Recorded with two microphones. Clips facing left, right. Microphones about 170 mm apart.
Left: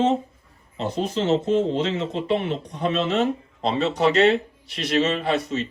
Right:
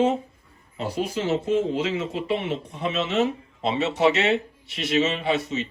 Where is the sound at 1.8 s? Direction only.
30° left (ahead or behind).